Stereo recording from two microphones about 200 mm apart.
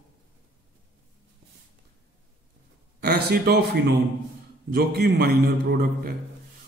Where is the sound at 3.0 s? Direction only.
50° right (ahead or behind).